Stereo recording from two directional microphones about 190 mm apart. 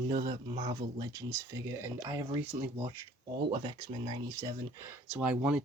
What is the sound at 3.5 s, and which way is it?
Speech, 25° right (ahead or behind).